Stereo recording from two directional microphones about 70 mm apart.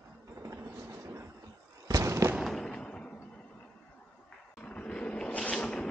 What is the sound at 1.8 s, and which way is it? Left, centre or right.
Fireworks, right.